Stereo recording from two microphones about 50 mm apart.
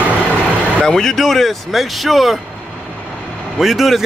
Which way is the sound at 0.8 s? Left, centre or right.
Centre.